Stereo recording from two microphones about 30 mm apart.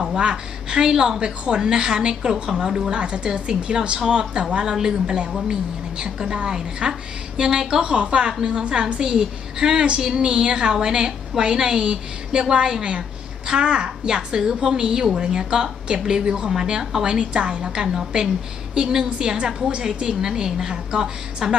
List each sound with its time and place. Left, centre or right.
0.2 s a woman's voice: right
2.9 s a woman's voice: right
9.8 s a woman's voice: right
20.0 s a woman's voice: right